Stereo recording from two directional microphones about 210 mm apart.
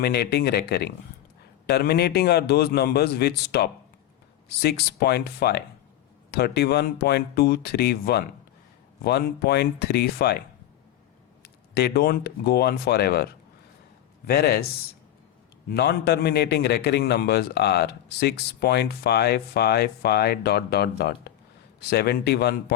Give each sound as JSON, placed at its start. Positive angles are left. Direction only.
{"t": 0.0, "sound": "a man's voice", "side_deg": 50}
{"t": 11.7, "sound": "a man's voice", "side_deg": 50}
{"t": 14.3, "sound": "a man's voice", "side_deg": 50}
{"t": 15.7, "sound": "a man's voice", "side_deg": 50}